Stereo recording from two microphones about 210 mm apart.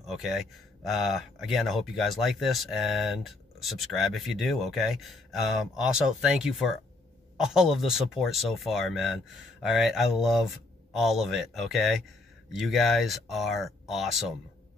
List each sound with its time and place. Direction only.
0.0 s speech: centre (ahead or behind)